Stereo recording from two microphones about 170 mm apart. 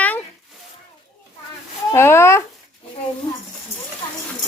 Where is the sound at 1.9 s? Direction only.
15° left (ahead or behind).